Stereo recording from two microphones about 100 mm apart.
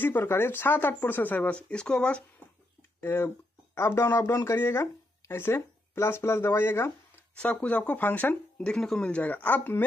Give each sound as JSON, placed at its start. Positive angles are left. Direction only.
{"t": 0.0, "sound": "speech", "side_deg": 20}
{"t": 3.0, "sound": "speech", "side_deg": 20}
{"t": 7.3, "sound": "speech", "side_deg": 15}